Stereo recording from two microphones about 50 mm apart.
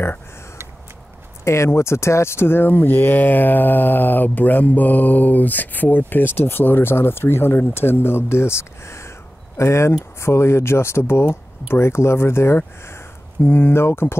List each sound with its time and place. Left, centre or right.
1.4 s speech: left